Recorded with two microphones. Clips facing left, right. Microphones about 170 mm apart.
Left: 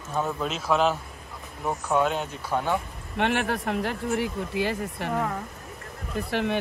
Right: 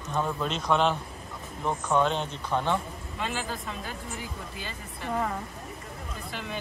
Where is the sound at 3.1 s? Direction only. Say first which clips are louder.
Left 8 dB; 70° left (ahead or behind).